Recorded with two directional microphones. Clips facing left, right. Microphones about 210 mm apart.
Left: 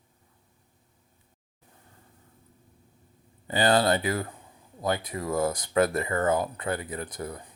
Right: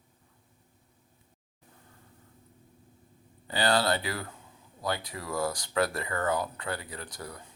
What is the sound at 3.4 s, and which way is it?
Speech, 20° left (ahead or behind).